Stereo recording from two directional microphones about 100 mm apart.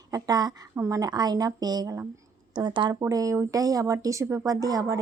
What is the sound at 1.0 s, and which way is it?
Speech, 40° right (ahead or behind).